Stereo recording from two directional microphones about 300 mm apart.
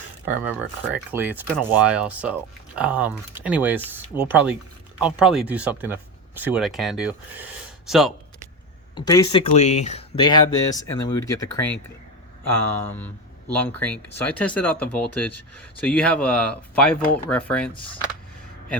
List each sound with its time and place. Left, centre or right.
0.3 s speech: centre
9.0 s speech: centre
17.7 s speech: centre